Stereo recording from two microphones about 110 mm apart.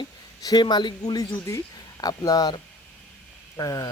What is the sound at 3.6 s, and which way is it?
Speech, 35° left (ahead or behind).